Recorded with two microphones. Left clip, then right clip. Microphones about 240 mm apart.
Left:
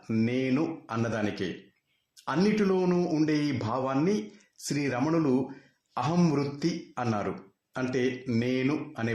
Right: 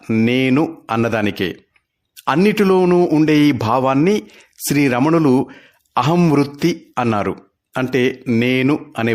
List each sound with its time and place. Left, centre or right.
0.0 s a man's voice: right